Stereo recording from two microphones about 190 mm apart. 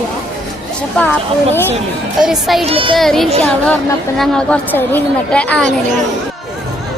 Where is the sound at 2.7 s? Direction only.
25° right (ahead or behind).